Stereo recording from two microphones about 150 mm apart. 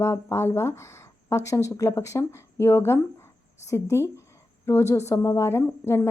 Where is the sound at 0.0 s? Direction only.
20° left (ahead or behind).